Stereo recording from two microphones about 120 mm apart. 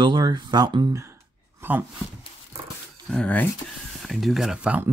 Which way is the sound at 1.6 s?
20° right (ahead or behind).